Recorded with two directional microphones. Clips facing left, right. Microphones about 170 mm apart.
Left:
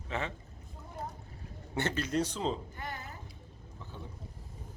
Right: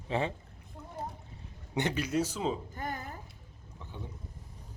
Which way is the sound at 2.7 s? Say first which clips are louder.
Right 4 dB; 45° right (ahead or behind).